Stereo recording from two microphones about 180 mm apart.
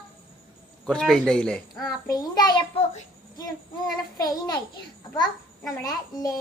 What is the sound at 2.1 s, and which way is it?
Speech, 20° left (ahead or behind).